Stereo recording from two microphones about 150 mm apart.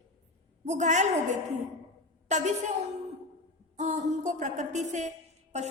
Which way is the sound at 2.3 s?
55° right (ahead or behind).